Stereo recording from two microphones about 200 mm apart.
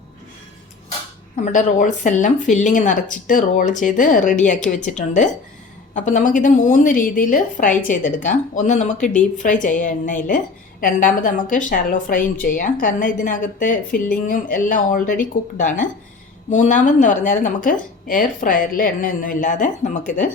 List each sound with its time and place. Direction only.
1.5 s a woman's voice: 40° left (ahead or behind)